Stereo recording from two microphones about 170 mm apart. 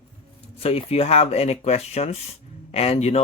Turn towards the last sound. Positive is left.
turn(degrees=40)  # may be behind; listen again after turning